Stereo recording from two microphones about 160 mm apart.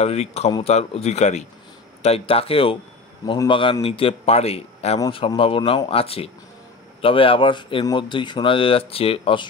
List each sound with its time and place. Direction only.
0.0 s speech: 40° left (ahead or behind)